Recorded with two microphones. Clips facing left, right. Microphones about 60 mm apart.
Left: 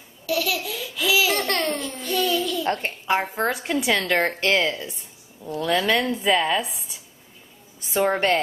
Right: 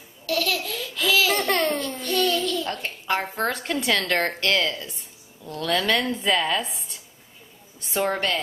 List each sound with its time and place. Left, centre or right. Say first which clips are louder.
0.3 s laughter: left 1 dB; centre
1.8 s babbling: right 1 dB; centre
2.6 s a sound: left 5 dB; left
3.1 s a woman's voice: left 2 dB; centre
4.4 s speech: left 2 dB; left; by 8.1 s centre